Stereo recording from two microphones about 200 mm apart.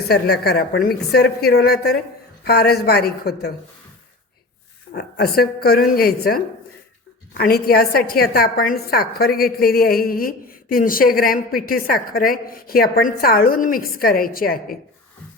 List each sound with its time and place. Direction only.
0.1 s a woman's voice: 50° left (ahead or behind)
4.9 s a woman's voice: 50° left (ahead or behind)